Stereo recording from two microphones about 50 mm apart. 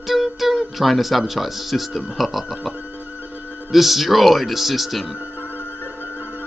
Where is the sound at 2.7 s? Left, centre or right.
Right.